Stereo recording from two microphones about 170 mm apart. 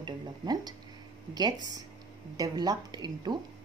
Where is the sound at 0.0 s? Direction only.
25° right (ahead or behind).